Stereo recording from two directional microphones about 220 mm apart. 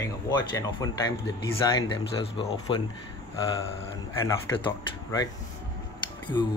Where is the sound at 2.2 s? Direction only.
25° left (ahead or behind).